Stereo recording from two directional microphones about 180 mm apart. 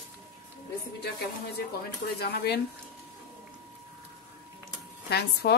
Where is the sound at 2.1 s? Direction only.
65° left (ahead or behind).